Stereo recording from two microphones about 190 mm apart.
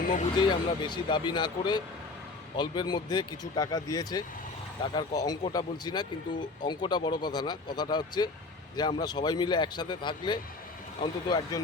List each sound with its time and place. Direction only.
0.0 s speech: 40° left (ahead or behind)
0.3 s speech: 25° left (ahead or behind)